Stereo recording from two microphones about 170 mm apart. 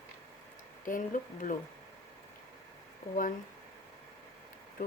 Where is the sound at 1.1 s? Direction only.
50° left (ahead or behind).